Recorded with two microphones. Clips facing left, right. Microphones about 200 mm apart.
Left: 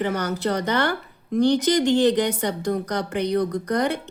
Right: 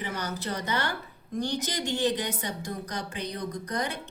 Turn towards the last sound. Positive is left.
turn(degrees=90)